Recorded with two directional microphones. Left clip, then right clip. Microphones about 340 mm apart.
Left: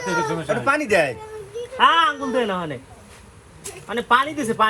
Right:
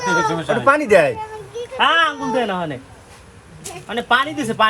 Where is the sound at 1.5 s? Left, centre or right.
Centre.